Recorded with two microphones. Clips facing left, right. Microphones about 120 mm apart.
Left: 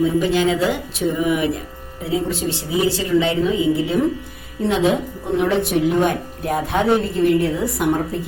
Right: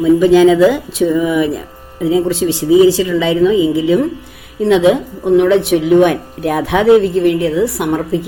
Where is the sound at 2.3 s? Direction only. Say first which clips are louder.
Right 11 dB; 90° right.